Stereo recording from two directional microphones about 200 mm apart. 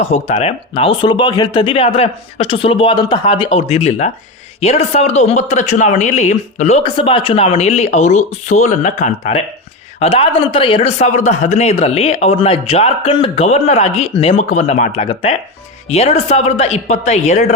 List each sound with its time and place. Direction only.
0.0 s a man's voice: 35° left (ahead or behind)